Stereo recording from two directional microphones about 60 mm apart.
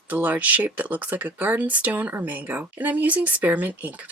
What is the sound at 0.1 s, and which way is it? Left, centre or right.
Speech, right.